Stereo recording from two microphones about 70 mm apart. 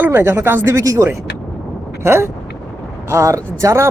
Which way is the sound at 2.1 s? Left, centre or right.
Right.